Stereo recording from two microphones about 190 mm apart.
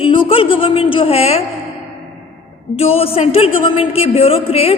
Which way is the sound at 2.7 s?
30° left (ahead or behind).